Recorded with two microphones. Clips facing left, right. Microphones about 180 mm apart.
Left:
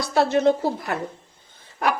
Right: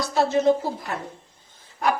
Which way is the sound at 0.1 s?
65° left (ahead or behind).